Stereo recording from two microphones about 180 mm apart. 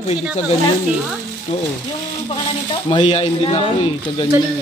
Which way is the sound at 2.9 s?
30° left (ahead or behind).